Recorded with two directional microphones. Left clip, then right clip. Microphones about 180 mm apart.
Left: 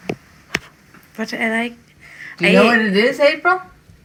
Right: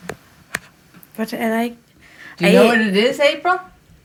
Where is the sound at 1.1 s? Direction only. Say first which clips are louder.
Left 1 dB; 15° right (ahead or behind).